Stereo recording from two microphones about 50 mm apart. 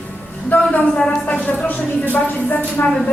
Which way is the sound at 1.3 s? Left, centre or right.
Left.